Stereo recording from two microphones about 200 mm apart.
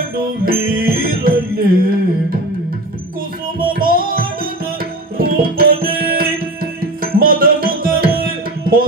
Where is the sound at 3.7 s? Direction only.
45° right (ahead or behind).